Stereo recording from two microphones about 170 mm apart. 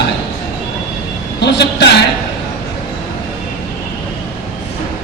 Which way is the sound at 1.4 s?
85° left.